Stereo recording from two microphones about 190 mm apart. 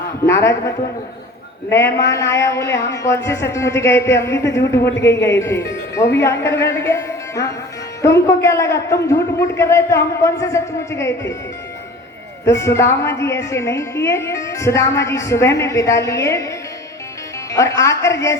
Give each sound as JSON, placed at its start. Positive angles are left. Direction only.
{"t": 0.3, "sound": "a woman's voice", "side_deg": 15}
{"t": 1.7, "sound": "a woman's voice", "side_deg": 15}
{"t": 12.5, "sound": "a woman's voice", "side_deg": 15}